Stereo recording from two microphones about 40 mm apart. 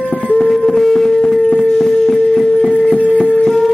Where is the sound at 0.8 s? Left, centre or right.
Centre.